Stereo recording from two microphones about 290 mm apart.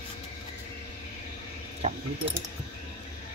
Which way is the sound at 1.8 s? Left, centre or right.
Right.